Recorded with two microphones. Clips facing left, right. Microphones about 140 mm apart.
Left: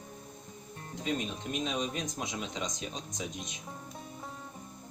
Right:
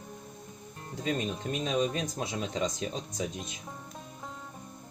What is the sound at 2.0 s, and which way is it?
Speech, 40° right (ahead or behind).